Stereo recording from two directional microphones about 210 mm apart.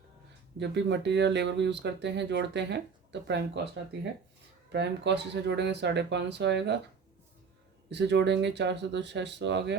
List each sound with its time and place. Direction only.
0.6 s speech: 55° right (ahead or behind)
4.7 s speech: 55° right (ahead or behind)
7.9 s speech: 55° right (ahead or behind)